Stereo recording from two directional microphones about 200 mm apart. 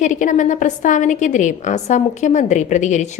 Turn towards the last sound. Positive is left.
turn(degrees=35)  # may be behind; listen again after turning